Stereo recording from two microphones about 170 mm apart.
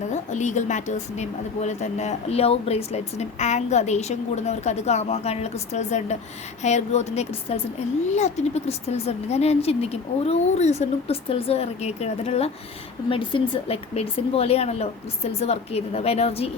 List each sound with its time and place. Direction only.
0.1 s a woman's voice: 45° left (ahead or behind)